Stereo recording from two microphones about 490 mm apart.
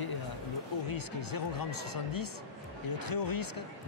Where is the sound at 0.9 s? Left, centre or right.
Left.